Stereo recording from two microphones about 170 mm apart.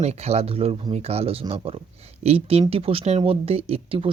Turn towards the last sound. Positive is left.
turn(degrees=-35)  # may be behind; listen again after turning